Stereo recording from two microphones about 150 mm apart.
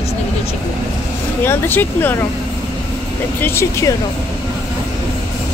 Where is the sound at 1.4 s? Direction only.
15° left (ahead or behind).